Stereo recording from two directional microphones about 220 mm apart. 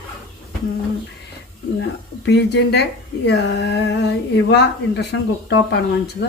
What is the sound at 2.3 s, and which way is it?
Speech, 50° left (ahead or behind).